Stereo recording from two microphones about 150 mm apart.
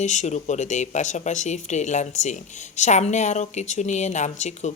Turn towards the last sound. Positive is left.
turn(degrees=50)  # may be behind; listen again after turning